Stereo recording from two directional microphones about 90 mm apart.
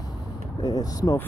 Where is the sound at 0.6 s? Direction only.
45° left (ahead or behind).